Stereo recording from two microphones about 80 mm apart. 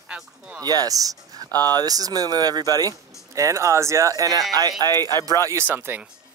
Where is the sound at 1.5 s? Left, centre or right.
Left.